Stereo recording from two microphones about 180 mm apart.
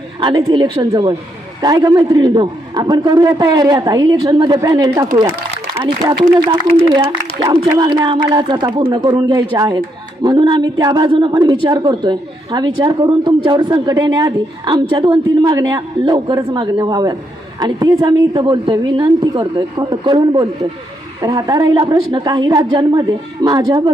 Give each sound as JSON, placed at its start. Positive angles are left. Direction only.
{"t": 0.2, "sound": "a woman's voice", "side_deg": -25}
{"t": 7.4, "sound": "a woman's voice", "side_deg": -20}